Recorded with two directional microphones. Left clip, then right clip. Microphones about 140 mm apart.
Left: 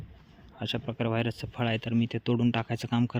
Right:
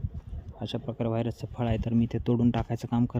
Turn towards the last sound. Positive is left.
turn(degrees=-15)  # may be behind; listen again after turning